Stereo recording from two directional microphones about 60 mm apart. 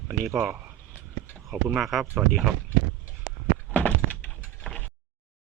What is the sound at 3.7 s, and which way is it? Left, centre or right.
Thunk, left.